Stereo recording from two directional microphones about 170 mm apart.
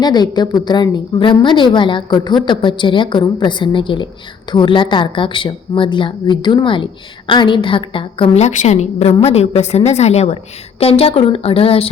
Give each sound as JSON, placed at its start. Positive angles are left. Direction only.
{"t": 0.0, "sound": "a woman's voice", "side_deg": 25}